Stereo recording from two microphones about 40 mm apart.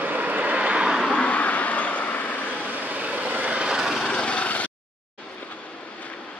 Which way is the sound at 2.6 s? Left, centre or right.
Right.